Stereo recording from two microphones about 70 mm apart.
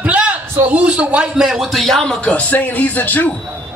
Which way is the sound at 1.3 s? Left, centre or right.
Centre.